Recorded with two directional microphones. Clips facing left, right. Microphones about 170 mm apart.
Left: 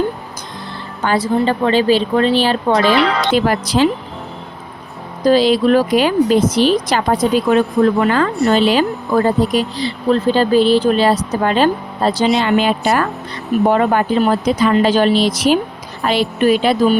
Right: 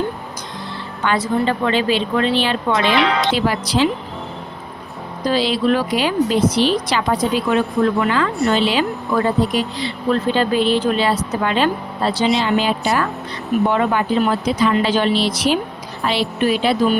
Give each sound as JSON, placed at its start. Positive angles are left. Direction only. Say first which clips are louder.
{"t": 1.0, "sound": "speech", "louder": "left 3 dB", "side_deg": 35}
{"t": 2.9, "sound": "speech", "louder": "left 2 dB", "side_deg": 0}
{"t": 3.3, "sound": "speech", "louder": "left 4 dB", "side_deg": 50}
{"t": 5.2, "sound": "speech", "louder": "left 6 dB", "side_deg": 45}
{"t": 12.5, "sound": "a woman's voice", "louder": "left 3 dB", "side_deg": 60}
{"t": 13.7, "sound": "speech", "louder": "left 6 dB", "side_deg": 40}